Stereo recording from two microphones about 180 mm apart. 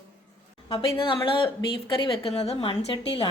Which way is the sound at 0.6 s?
30° left (ahead or behind).